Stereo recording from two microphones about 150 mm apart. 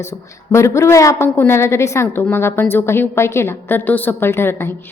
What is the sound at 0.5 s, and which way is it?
A woman's voice, 20° left (ahead or behind).